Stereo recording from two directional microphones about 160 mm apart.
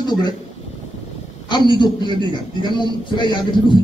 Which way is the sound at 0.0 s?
25° left (ahead or behind).